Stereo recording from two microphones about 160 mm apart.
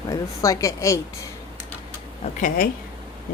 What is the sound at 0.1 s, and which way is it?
Speech, 20° left (ahead or behind).